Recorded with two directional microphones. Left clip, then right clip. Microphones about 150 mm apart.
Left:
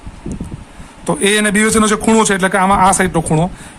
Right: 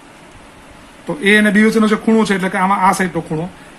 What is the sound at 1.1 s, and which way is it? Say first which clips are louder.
A man's voice: right 1 dB; 45° left (ahead or behind).